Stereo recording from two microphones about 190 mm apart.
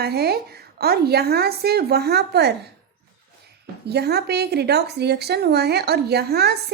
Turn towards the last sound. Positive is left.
turn(degrees=-60)  # may be behind; listen again after turning